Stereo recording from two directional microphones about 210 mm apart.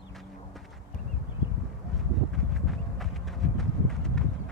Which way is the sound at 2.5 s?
Centre (ahead or behind).